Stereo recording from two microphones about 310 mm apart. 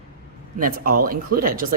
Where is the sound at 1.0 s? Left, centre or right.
Right.